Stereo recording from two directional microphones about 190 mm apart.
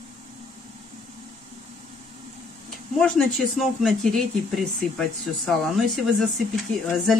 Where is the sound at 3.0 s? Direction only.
5° left (ahead or behind).